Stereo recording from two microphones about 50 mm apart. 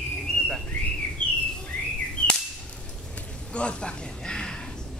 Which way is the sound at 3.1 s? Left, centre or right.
Left.